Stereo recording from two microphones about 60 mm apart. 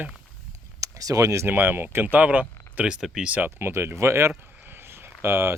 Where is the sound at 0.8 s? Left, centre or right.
Right.